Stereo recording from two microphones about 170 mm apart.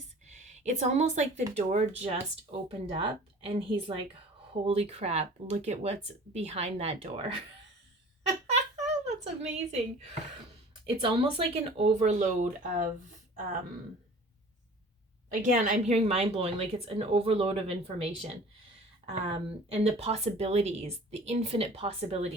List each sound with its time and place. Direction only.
0.3 s a woman's voice: 45° right (ahead or behind)
8.4 s a sound: 40° right (ahead or behind)
10.8 s speech: 30° right (ahead or behind); by 12.9 s 50° right (ahead or behind)
15.3 s speech: 50° right (ahead or behind)